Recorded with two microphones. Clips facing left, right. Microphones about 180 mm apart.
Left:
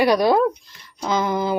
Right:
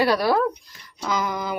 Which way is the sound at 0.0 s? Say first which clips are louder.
Left 4 dB; 15° left (ahead or behind).